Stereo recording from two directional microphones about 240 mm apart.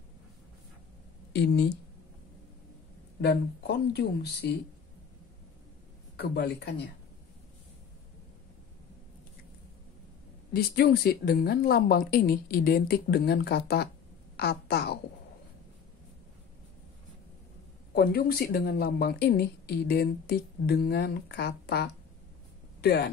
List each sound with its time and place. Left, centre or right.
1.3 s speech: left
3.2 s speech: left
6.1 s speech: left
10.5 s a woman's voice: left
17.9 s a woman's voice: left